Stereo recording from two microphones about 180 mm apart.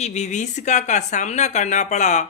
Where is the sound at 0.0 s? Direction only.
40° left (ahead or behind).